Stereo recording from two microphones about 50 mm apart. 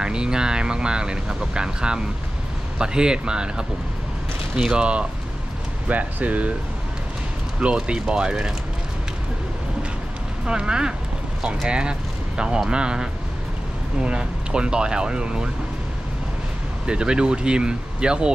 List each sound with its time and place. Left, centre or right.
0.0 s speech: centre
5.9 s speech: right
7.6 s speech: centre
10.4 s speech: centre
16.8 s speech: centre